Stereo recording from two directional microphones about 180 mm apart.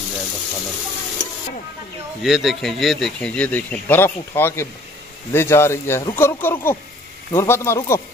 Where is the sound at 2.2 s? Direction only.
Centre (ahead or behind); by 8.0 s 15° left (ahead or behind).